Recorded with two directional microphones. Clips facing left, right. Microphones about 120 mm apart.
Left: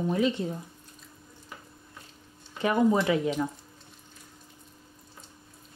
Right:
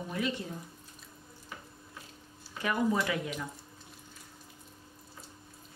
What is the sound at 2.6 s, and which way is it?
Speech, 25° left (ahead or behind).